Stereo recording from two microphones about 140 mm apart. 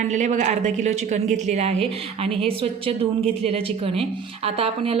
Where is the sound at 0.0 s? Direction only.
60° right (ahead or behind).